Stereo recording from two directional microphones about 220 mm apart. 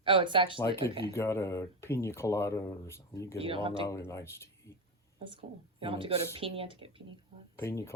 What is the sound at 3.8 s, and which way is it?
Speech, 15° left (ahead or behind).